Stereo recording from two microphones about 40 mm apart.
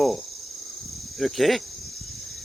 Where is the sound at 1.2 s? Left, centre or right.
Centre.